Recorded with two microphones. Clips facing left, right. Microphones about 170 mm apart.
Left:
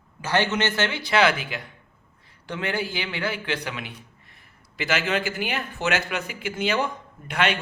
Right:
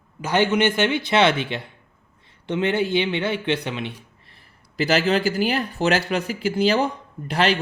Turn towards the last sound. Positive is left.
turn(degrees=-35)  # may be behind; listen again after turning